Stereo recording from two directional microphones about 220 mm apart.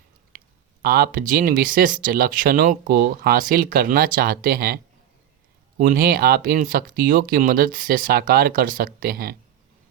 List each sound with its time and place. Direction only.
0.8 s speech: 45° right (ahead or behind)
5.8 s speech: 40° right (ahead or behind)